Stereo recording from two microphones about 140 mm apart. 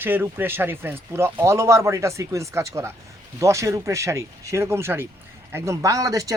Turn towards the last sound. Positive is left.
turn(degrees=-25)  # may be behind; listen again after turning